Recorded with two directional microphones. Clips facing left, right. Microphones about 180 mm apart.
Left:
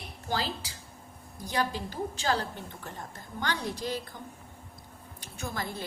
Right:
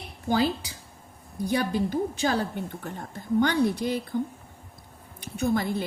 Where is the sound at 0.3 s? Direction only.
60° right (ahead or behind).